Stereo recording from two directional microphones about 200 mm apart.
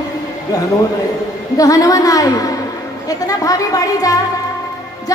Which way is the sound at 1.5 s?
15° left (ahead or behind).